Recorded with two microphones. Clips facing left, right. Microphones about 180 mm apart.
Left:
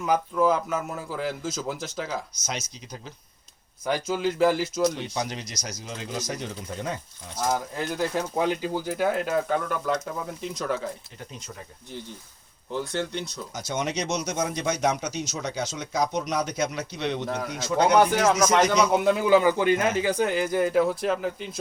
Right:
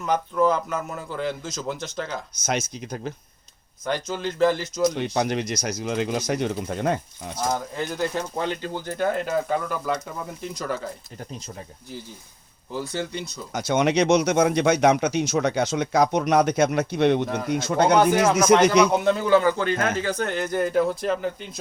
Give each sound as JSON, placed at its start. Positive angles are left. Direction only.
{"t": 0.0, "sound": "speech", "side_deg": 5}
{"t": 2.5, "sound": "speech", "side_deg": -55}
{"t": 3.8, "sound": "speech", "side_deg": 5}
{"t": 5.1, "sound": "speech", "side_deg": -60}
{"t": 7.5, "sound": "speech", "side_deg": 5}
{"t": 12.7, "sound": "speech", "side_deg": -5}
{"t": 13.5, "sound": "speech", "side_deg": -65}
{"t": 17.9, "sound": "speech", "side_deg": 0}
{"t": 18.6, "sound": "speech", "side_deg": -65}
{"t": 18.9, "sound": "speech", "side_deg": 5}